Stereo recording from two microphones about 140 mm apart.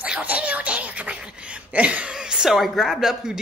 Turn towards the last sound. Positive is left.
turn(degrees=-5)  # may be behind; listen again after turning